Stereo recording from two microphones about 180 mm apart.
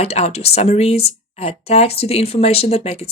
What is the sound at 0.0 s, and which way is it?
Speech, 35° left (ahead or behind).